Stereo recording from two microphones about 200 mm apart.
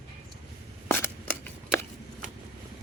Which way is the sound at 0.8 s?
10° left (ahead or behind).